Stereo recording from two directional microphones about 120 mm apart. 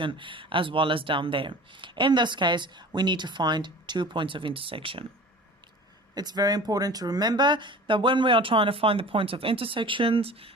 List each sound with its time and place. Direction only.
0.0 s speech: 45° right (ahead or behind)
6.1 s speech: 35° right (ahead or behind); by 10.5 s 50° right (ahead or behind)